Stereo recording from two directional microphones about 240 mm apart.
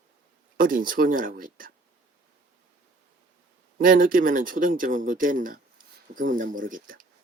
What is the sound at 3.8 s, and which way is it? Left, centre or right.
Speech, right.